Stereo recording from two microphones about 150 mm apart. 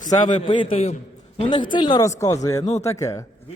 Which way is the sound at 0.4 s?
35° left (ahead or behind).